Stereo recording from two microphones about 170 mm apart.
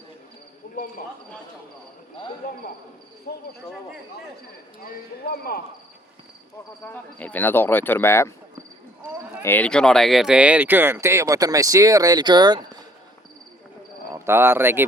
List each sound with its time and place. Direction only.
3.3 s speech: 70° left (ahead or behind)
4.8 s speech: 60° left (ahead or behind)
6.8 s speech: 10° left (ahead or behind)
9.4 s speech: 10° left (ahead or behind); by 12.8 s 25° right (ahead or behind)
14.1 s speech: 15° right (ahead or behind)